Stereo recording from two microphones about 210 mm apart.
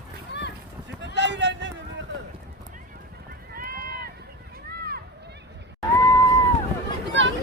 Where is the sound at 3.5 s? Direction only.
45° right (ahead or behind).